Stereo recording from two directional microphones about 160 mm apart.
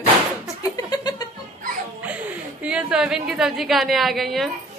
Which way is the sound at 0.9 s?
25° left (ahead or behind).